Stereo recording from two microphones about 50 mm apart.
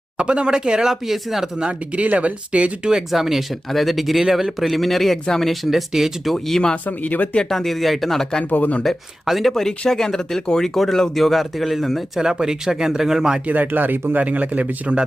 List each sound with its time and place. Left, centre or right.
0.2 s speech: centre
1.5 s speech: right
2.9 s speech: centre
5.9 s speech: centre
6.8 s speech: left
7.5 s speech: centre
8.4 s speech: left
8.8 s speech: centre
12.2 s speech: centre
13.5 s speech: right